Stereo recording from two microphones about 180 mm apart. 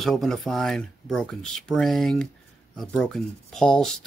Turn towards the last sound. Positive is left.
turn(degrees=0)  # may be behind; listen again after turning